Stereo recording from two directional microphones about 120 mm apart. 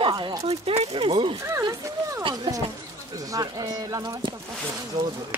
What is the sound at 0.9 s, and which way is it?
Speech, 45° right (ahead or behind).